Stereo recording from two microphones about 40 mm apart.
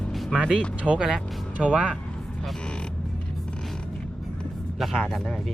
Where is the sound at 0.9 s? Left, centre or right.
Centre.